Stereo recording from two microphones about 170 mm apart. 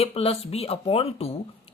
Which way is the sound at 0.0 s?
35° left (ahead or behind).